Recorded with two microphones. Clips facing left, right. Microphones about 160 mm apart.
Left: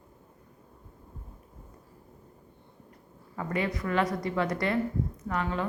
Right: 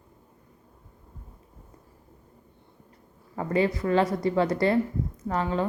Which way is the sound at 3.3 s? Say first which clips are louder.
Right 6 dB; 30° right (ahead or behind).